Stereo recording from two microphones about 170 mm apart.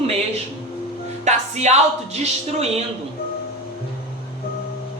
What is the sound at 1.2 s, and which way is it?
Speech, 40° right (ahead or behind).